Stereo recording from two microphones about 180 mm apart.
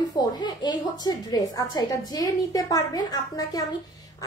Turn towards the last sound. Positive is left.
turn(degrees=20)  # may be behind; listen again after turning